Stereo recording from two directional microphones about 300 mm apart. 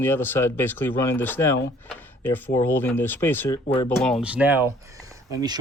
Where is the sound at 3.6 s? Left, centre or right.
Centre.